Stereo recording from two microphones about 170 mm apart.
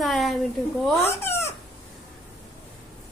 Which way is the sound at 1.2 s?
15° left (ahead or behind).